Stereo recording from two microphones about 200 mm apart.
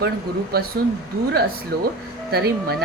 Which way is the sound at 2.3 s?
50° right (ahead or behind).